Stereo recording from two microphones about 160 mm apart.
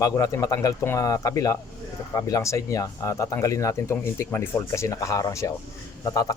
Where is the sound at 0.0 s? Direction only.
20° left (ahead or behind).